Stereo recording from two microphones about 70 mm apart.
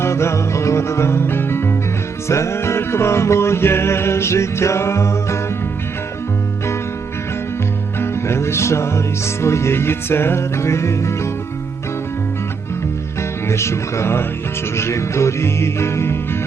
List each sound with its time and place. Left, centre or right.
0.0 s music: left
7.9 s music: left
13.5 s music: left